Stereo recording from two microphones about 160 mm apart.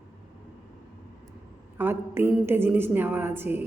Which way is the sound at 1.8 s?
15° right (ahead or behind).